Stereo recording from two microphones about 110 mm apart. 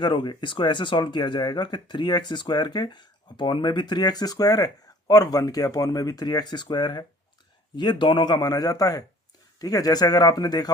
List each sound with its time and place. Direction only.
0.0 s speech: 50° left (ahead or behind)